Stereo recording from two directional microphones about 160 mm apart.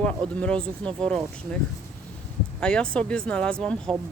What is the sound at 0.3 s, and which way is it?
Speech, 5° left (ahead or behind).